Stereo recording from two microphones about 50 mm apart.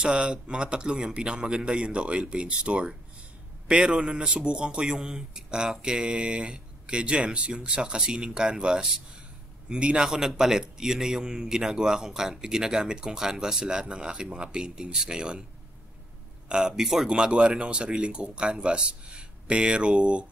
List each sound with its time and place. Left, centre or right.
0.0 s a man's voice: centre
16.4 s speech: centre